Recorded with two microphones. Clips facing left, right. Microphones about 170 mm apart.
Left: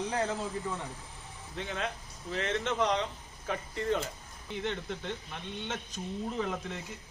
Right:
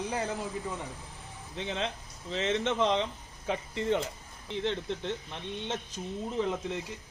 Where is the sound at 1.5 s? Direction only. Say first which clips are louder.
Right 2 dB; 20° right (ahead or behind).